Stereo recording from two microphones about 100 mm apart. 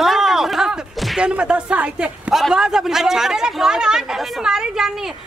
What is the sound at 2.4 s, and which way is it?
A man's voice, 5° right (ahead or behind).